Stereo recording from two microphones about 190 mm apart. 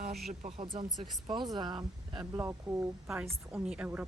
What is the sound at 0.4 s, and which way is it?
Speech, 30° right (ahead or behind).